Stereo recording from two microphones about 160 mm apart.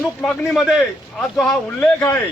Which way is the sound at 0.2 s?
5° left (ahead or behind).